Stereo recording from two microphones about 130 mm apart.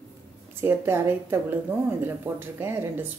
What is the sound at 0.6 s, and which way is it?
Speech, 20° right (ahead or behind).